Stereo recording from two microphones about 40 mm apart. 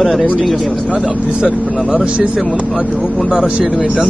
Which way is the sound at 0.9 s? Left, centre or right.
Right.